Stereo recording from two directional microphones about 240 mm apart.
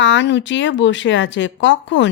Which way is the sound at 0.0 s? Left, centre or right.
Left.